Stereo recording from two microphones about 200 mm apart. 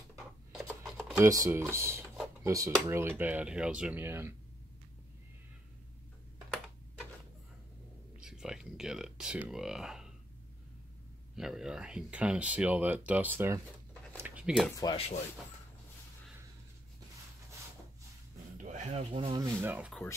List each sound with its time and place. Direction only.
0.5 s a sound: centre (ahead or behind)
1.1 s speech: 15° right (ahead or behind)
8.2 s a sound: 5° right (ahead or behind)
11.3 s speech: centre (ahead or behind)
14.1 s a sound: 5° right (ahead or behind)
14.8 s speech: 20° left (ahead or behind)
18.6 s speech: 35° right (ahead or behind)
19.5 s speech: 10° right (ahead or behind)
19.9 s speech: 5° left (ahead or behind)